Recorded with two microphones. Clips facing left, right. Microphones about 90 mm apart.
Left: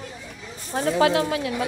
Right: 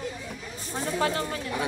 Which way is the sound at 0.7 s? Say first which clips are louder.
Left 8 dB; 90° left.